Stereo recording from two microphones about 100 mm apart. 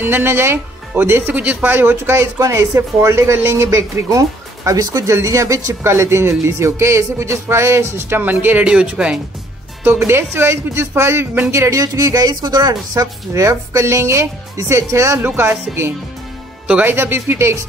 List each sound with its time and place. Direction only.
0.0 s speech: 20° right (ahead or behind)
9.8 s speech: 25° right (ahead or behind)
16.6 s speech: 15° right (ahead or behind)